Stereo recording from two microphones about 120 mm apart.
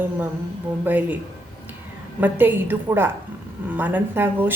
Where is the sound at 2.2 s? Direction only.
15° right (ahead or behind).